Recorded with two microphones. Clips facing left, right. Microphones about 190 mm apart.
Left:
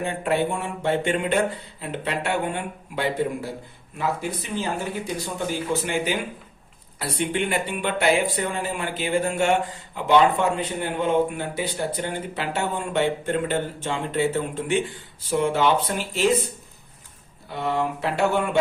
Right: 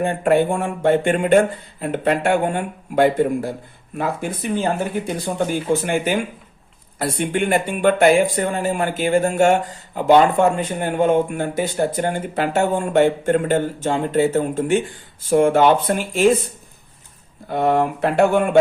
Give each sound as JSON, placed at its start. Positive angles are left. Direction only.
{"t": 0.0, "sound": "speech", "side_deg": -50}
{"t": 17.5, "sound": "speech", "side_deg": -55}